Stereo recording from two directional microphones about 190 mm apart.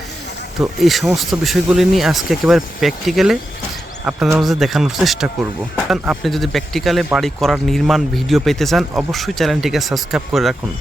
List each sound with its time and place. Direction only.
0.6 s speech: centre (ahead or behind)